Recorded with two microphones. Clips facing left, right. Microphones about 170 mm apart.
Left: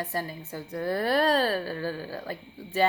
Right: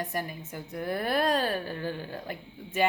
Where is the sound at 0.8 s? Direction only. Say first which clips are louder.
Left 3 dB; 35° left (ahead or behind).